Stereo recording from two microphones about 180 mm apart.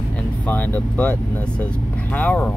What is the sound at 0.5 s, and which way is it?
Speech, 10° left (ahead or behind).